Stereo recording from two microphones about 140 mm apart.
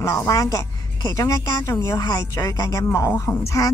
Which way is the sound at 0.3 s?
25° left (ahead or behind).